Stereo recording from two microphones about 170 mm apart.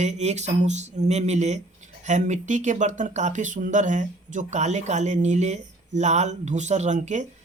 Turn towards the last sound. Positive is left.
turn(degrees=-45)  # may be behind; listen again after turning